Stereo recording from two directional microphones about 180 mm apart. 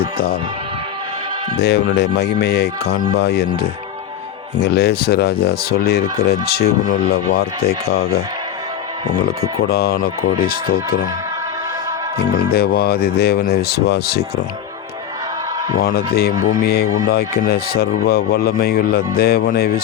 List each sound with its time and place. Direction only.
0.0 s speech: 55° left (ahead or behind)
1.5 s speech: 65° left (ahead or behind)
9.2 s speech: 60° left (ahead or behind)
12.1 s speech: 60° left (ahead or behind)
15.8 s speech: 60° left (ahead or behind)